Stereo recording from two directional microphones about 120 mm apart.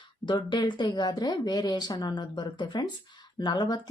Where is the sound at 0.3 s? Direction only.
40° left (ahead or behind).